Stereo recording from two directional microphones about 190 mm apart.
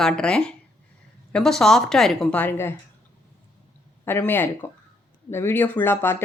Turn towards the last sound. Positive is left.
turn(degrees=10)  # may be behind; listen again after turning